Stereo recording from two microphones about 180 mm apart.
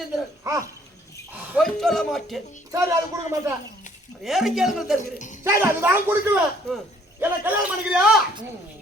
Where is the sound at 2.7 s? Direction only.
15° right (ahead or behind).